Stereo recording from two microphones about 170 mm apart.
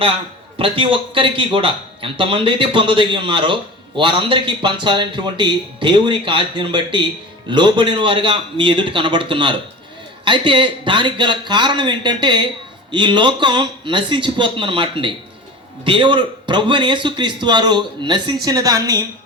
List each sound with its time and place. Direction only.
0.6 s speech: 30° right (ahead or behind)